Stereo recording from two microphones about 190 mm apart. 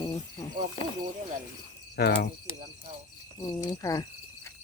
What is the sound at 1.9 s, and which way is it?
Speech, 60° left (ahead or behind).